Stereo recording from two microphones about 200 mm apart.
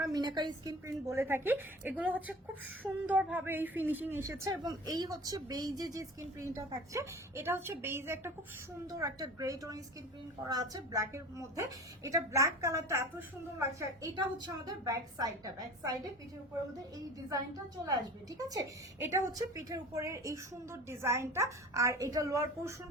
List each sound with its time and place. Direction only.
0.0 s a woman's voice: 20° right (ahead or behind)
17.8 s a woman's voice: 15° right (ahead or behind)